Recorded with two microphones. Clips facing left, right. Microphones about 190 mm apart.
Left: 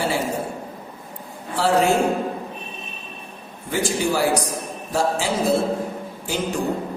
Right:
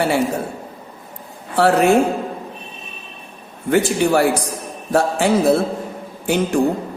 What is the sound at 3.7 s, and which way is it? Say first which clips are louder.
A man's voice: right 6 dB; 60° right (ahead or behind).